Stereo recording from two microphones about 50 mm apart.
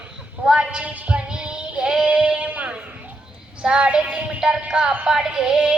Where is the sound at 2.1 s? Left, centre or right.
Right.